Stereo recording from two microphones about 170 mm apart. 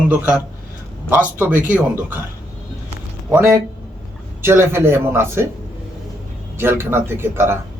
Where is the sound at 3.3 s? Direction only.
15° right (ahead or behind).